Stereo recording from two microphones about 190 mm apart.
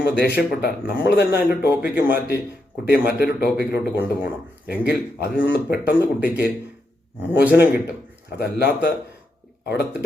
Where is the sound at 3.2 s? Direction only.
55° left (ahead or behind).